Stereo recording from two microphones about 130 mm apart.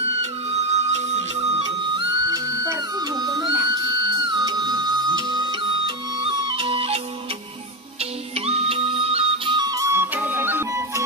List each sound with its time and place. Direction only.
0.5 s music: 55° right (ahead or behind)
2.2 s music: 30° right (ahead or behind); by 7.0 s 45° right (ahead or behind)
8.0 s music: 50° right (ahead or behind); by 11.1 s 20° right (ahead or behind)